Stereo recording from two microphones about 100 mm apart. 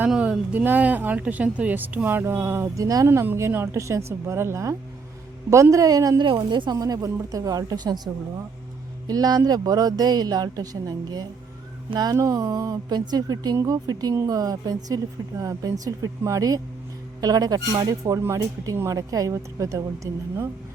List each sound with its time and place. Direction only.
0.2 s a woman's voice: 15° right (ahead or behind)
5.7 s a woman's voice: 35° right (ahead or behind)
6.2 s a woman's voice: 55° right (ahead or behind); by 20.2 s 30° right (ahead or behind)